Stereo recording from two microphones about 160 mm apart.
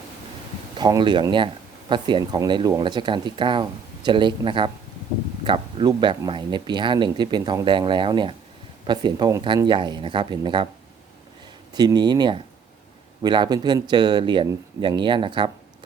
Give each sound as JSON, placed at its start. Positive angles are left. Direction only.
{"t": 0.8, "sound": "speech", "side_deg": -25}
{"t": 11.7, "sound": "speech", "side_deg": -25}